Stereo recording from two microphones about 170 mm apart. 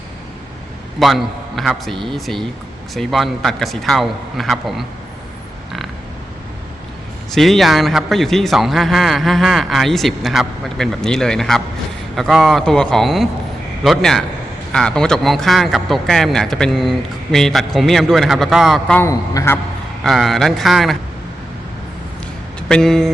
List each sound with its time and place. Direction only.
0.9 s a man's voice: centre (ahead or behind)
7.3 s a man's voice: centre (ahead or behind)
18.9 s a man's voice: 15° left (ahead or behind)
20.1 s a man's voice: centre (ahead or behind)
22.7 s a man's voice: 5° left (ahead or behind)